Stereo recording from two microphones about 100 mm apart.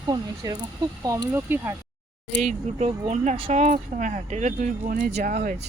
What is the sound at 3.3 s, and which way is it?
Speech, 75° right (ahead or behind).